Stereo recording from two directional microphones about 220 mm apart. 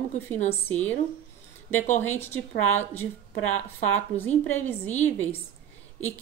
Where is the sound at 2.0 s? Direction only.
10° left (ahead or behind).